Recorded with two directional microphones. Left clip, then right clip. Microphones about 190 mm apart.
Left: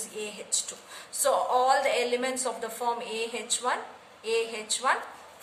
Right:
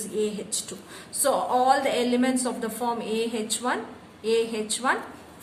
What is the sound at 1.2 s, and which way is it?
A woman's voice, 5° right (ahead or behind).